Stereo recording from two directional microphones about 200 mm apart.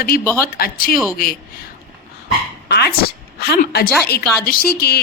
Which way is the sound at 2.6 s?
55° left (ahead or behind).